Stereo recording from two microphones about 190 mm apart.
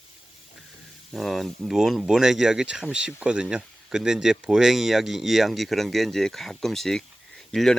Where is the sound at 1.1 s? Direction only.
Centre (ahead or behind).